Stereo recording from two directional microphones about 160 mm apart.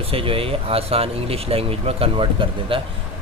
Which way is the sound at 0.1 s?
35° right (ahead or behind).